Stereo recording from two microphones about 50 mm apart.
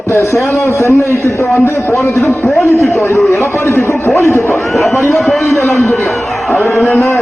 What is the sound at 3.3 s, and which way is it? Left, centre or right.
A man's voice, left.